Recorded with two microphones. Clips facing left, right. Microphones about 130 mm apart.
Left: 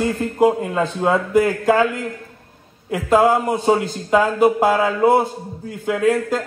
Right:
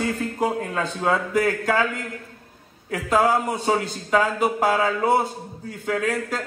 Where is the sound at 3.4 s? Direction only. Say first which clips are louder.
Left 6 dB; 45° left (ahead or behind).